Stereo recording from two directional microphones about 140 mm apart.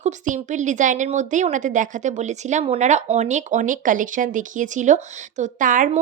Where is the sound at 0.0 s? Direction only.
60° right (ahead or behind).